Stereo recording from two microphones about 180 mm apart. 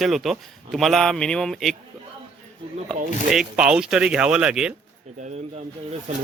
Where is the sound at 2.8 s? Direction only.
Centre (ahead or behind).